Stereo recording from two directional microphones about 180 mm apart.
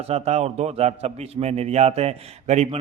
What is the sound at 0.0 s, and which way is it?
A man's voice, 35° right (ahead or behind).